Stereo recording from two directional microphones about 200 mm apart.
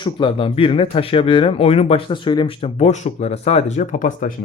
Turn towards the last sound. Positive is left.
turn(degrees=40)  # may be behind; listen again after turning